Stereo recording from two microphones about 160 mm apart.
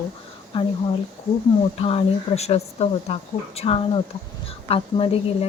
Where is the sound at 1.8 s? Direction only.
35° left (ahead or behind).